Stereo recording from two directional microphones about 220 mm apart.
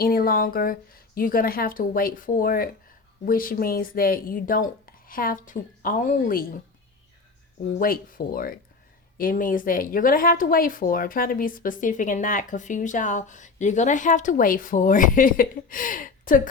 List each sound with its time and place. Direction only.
0.0 s speech: 40° left (ahead or behind)
7.7 s speech: 40° left (ahead or behind)